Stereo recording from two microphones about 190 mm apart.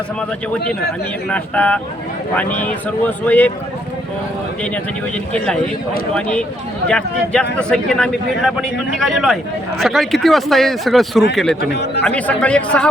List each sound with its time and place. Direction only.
1.3 s speech: 10° left (ahead or behind)
6.1 s a man's voice: 5° left (ahead or behind)
11.7 s speech: 60° left (ahead or behind)
12.0 s a man's voice: 5° left (ahead or behind)